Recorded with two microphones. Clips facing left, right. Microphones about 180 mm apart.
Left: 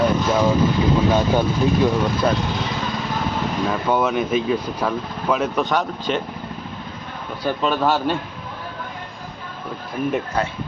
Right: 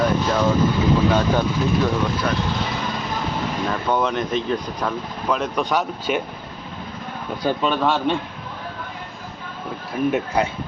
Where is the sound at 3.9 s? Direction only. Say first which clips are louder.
Left 2 dB; 5° left (ahead or behind).